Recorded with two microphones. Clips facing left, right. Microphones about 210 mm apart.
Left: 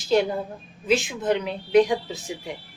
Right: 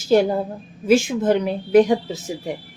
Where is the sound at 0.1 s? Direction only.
45° right (ahead or behind).